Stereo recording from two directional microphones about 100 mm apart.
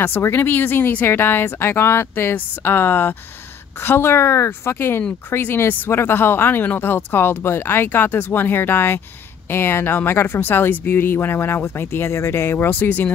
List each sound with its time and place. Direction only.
0.0 s speech: 25° left (ahead or behind)